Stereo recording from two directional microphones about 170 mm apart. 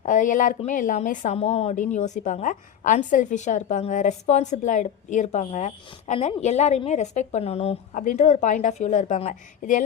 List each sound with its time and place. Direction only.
0.0 s a woman's voice: 50° left (ahead or behind)
7.9 s a woman's voice: 45° left (ahead or behind)